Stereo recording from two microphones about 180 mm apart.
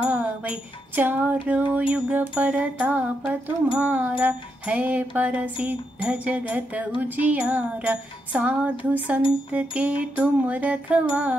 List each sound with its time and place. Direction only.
0.0 s music: 5° right (ahead or behind)